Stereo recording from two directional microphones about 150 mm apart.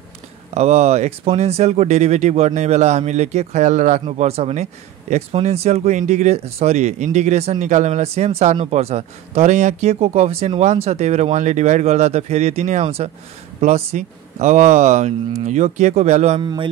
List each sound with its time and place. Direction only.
0.6 s speech: 45° right (ahead or behind)
4.0 s speech: 45° right (ahead or behind)
16.3 s speech: 35° right (ahead or behind)